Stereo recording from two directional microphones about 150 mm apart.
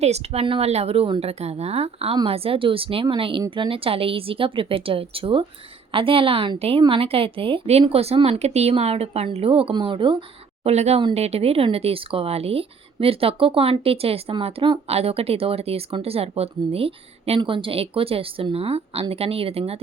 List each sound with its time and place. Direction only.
0.0 s speech: 45° right (ahead or behind)